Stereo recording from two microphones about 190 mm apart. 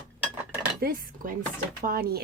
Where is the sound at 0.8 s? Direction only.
50° right (ahead or behind).